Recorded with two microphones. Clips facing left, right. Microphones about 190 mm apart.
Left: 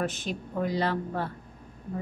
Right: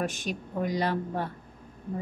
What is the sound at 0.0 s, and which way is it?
A woman's voice, 15° right (ahead or behind).